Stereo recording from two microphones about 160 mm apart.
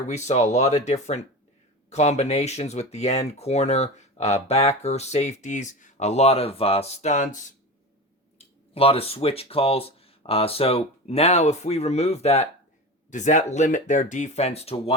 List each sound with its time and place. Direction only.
0.1 s speech: 45° left (ahead or behind)
8.7 s speech: 35° left (ahead or behind)